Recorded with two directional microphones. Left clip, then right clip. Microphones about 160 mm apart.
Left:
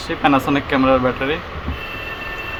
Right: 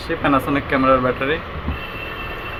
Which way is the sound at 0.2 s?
50° left (ahead or behind).